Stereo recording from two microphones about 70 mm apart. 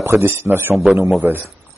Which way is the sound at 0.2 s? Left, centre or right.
Right.